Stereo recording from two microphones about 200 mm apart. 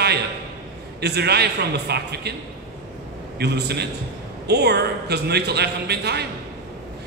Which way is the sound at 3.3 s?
55° right (ahead or behind).